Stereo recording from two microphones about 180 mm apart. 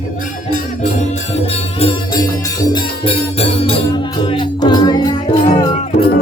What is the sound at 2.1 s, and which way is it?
Music, 25° left (ahead or behind).